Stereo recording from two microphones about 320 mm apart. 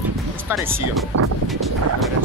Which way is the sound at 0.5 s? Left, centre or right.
Centre.